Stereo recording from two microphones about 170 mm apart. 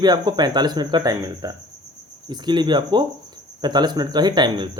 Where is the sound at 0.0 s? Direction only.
25° right (ahead or behind).